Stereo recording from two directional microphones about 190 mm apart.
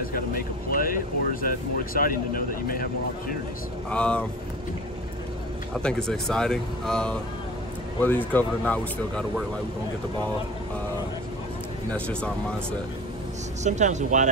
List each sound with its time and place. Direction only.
0.7 s speech: 50° left (ahead or behind)
3.9 s speech: 5° left (ahead or behind)
5.8 s speech: 5° left (ahead or behind)
8.3 s speech: 10° left (ahead or behind)
11.9 s speech: 5° left (ahead or behind)
13.7 s speech: 40° right (ahead or behind)